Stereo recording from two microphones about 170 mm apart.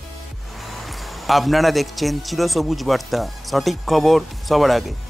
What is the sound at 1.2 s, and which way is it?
A man's voice, centre (ahead or behind).